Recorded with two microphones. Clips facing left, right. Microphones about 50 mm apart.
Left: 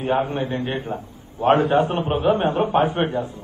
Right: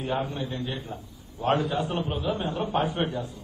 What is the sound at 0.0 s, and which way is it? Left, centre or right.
A man's voice, left.